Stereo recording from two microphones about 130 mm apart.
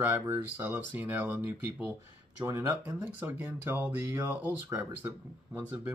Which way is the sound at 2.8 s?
15° right (ahead or behind).